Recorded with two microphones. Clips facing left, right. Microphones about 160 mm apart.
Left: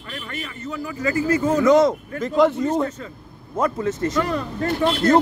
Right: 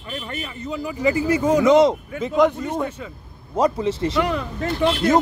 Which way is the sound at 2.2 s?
10° right (ahead or behind).